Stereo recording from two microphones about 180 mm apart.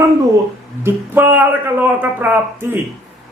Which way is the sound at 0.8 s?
10° right (ahead or behind).